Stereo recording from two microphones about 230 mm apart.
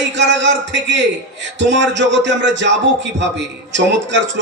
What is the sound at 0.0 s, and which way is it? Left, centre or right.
A man's voice, right.